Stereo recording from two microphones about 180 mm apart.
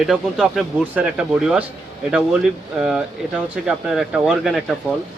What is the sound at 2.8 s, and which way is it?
Speech, 5° right (ahead or behind).